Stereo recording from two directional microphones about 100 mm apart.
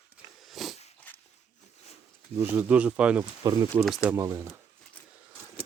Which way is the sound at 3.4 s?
40° right (ahead or behind).